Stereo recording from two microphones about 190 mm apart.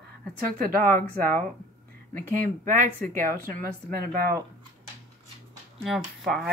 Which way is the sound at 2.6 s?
45° right (ahead or behind).